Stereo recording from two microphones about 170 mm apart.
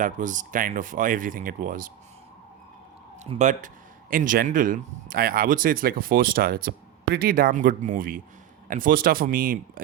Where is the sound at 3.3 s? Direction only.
45° right (ahead or behind).